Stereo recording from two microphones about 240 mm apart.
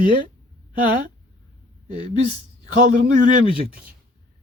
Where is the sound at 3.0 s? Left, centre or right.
Right.